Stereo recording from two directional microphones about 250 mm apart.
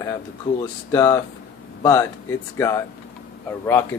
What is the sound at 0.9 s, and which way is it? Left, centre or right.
Speech, centre.